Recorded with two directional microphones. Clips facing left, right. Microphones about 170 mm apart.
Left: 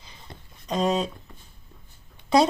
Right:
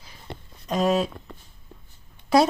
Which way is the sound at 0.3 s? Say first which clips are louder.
Right 8 dB; 75° right (ahead or behind).